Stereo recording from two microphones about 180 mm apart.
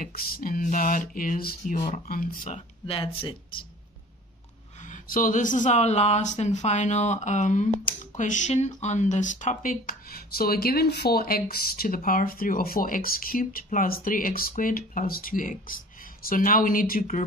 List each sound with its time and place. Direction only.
0.0 s speech: 55° left (ahead or behind)
2.4 s speech: 30° left (ahead or behind)
4.7 s speech: 45° left (ahead or behind)